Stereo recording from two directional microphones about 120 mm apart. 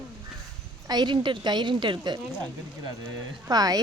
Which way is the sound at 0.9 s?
35° right (ahead or behind).